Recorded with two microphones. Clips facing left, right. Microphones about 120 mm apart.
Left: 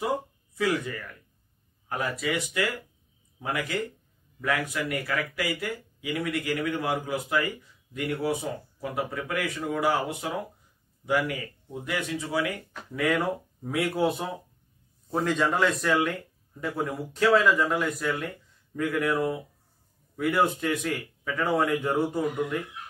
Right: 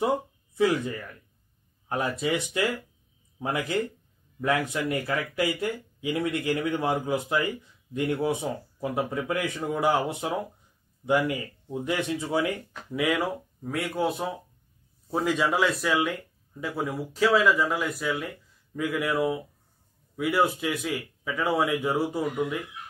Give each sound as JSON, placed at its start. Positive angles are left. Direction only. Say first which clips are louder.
{"t": 0.6, "sound": "a man's voice", "louder": "right 3 dB", "side_deg": -25}
{"t": 13.1, "sound": "speech", "louder": "left 1 dB", "side_deg": 0}